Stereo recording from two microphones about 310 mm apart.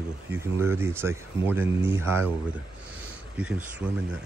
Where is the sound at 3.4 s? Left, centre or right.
Centre.